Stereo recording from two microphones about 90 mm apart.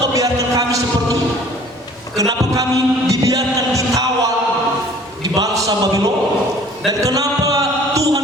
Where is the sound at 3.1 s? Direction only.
40° right (ahead or behind).